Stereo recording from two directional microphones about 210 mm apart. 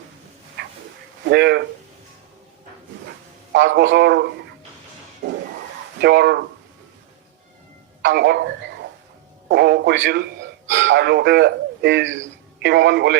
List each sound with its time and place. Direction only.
0.6 s a sound: 55° right (ahead or behind)
1.2 s speech: 50° right (ahead or behind)
3.5 s a man's voice: 60° right (ahead or behind)
6.0 s speech: 55° right (ahead or behind)
8.0 s a man's voice: 55° right (ahead or behind)
9.5 s a man's voice: 55° right (ahead or behind)